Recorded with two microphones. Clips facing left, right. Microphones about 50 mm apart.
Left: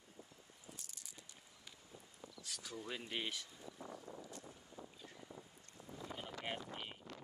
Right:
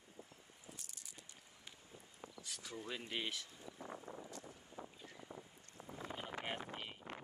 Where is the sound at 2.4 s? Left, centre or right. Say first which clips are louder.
Left 1 dB; right.